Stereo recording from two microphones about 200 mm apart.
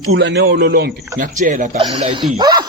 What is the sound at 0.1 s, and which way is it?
A man's voice, 60° right (ahead or behind).